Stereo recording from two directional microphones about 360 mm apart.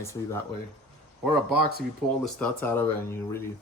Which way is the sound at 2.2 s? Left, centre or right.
Centre.